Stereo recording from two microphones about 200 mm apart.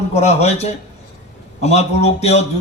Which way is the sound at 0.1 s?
35° left (ahead or behind).